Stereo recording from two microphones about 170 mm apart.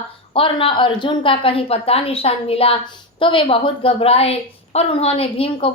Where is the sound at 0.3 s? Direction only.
30° left (ahead or behind).